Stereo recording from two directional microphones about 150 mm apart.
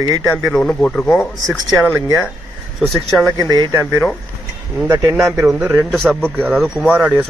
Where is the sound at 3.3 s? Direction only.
25° right (ahead or behind).